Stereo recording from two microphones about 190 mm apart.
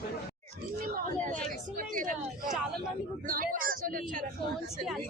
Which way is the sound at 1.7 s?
45° right (ahead or behind).